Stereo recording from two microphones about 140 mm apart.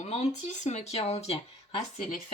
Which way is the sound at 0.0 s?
50° left (ahead or behind).